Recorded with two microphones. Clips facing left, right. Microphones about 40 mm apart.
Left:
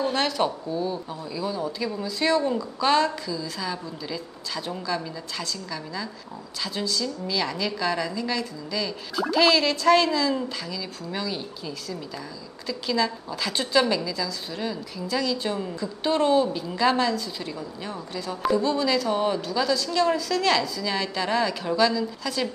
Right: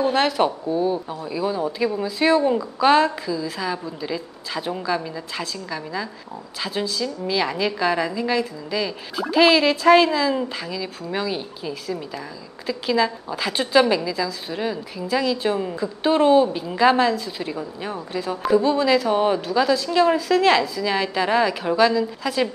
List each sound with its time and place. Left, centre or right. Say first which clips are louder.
0.0 s a woman's voice: right 5 dB; centre